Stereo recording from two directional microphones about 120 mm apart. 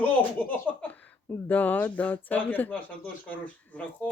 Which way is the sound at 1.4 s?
15° left (ahead or behind).